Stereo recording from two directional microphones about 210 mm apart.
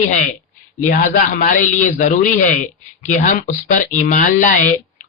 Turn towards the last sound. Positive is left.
turn(degrees=35)  # may be behind; listen again after turning